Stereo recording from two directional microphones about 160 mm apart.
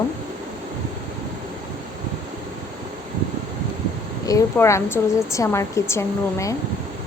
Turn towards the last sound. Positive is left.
turn(degrees=20)  # may be behind; listen again after turning